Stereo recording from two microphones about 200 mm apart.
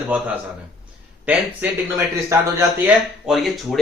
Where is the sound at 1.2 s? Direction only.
10° right (ahead or behind).